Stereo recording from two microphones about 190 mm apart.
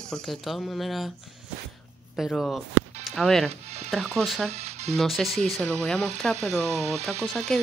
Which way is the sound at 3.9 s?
Centre (ahead or behind).